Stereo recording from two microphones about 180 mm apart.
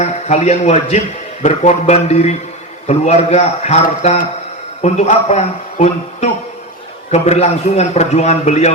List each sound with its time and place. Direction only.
0.0 s a man's voice: 40° left (ahead or behind)